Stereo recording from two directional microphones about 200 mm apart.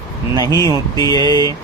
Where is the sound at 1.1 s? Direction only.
20° right (ahead or behind).